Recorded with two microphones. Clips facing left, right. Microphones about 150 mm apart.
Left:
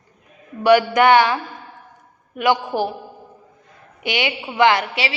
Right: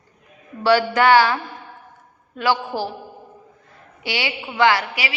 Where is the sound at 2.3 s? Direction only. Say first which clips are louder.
Left 3 dB; 15° left (ahead or behind).